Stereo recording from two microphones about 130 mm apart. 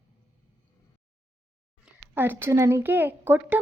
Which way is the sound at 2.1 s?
15° right (ahead or behind).